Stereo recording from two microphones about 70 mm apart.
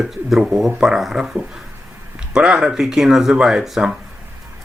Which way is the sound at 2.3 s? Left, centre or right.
Centre.